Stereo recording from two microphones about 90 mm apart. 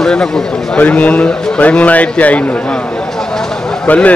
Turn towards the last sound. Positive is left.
turn(degrees=15)  # may be behind; listen again after turning